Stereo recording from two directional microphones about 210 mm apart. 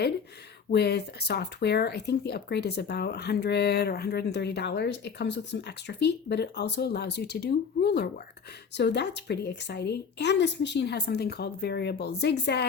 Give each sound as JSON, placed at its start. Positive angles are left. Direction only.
{"t": 0.7, "sound": "speech", "side_deg": 50}